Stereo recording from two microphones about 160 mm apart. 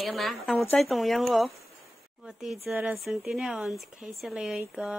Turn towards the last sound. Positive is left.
turn(degrees=-5)  # may be behind; listen again after turning